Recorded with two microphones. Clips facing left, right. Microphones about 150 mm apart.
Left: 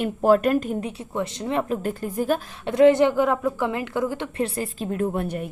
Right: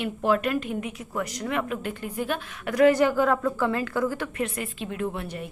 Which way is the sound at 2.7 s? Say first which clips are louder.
Left 3 dB; 25° left (ahead or behind).